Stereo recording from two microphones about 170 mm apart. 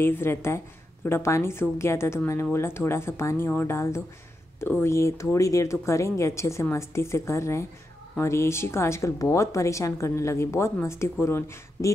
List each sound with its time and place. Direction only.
0.0 s speech: 15° left (ahead or behind)